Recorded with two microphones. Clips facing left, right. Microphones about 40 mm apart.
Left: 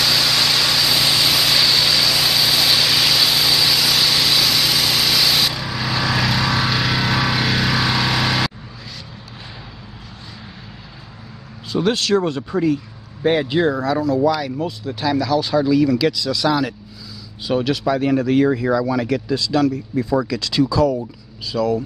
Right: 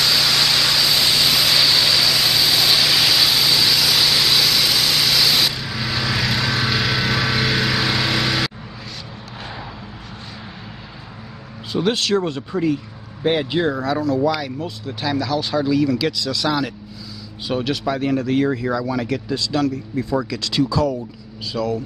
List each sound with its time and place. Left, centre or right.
0.0 s vehicle: centre
11.7 s speech: centre
18.1 s speech: centre